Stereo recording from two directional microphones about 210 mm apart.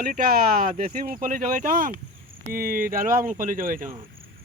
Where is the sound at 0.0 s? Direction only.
45° right (ahead or behind).